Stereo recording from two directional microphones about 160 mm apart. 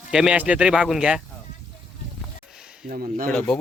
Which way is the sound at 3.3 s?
5° left (ahead or behind).